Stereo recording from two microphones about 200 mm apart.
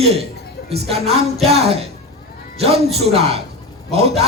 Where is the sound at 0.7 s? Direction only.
30° right (ahead or behind).